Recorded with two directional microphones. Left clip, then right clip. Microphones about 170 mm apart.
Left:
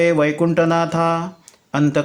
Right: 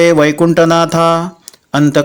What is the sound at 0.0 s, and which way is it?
Speech, 35° right (ahead or behind).